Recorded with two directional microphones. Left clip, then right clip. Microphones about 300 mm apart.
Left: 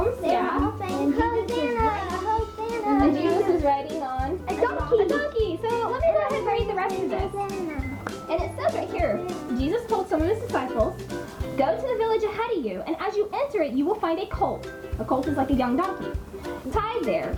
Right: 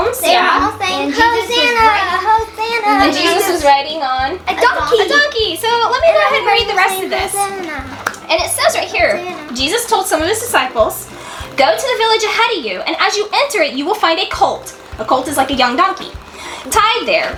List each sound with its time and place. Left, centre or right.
0.0 s a sound: centre
10.2 s a woman's voice: centre
14.4 s speech: centre
15.4 s a woman's voice: centre